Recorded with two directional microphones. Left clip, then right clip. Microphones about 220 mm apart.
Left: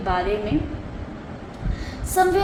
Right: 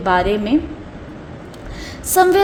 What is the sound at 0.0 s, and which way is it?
Speech, 55° right (ahead or behind).